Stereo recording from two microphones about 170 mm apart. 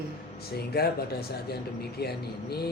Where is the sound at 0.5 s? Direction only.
65° left (ahead or behind).